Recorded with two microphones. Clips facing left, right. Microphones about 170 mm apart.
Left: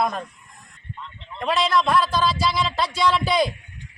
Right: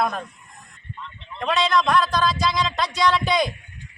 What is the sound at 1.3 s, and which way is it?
A man's voice, 5° left (ahead or behind).